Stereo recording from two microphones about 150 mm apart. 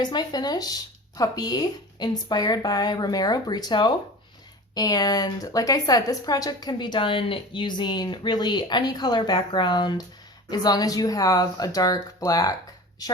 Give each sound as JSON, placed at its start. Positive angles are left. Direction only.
{"t": 0.0, "sound": "a woman's voice", "side_deg": 30}